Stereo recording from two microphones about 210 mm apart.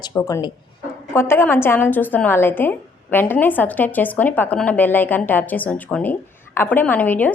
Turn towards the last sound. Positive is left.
turn(degrees=10)  # may be behind; listen again after turning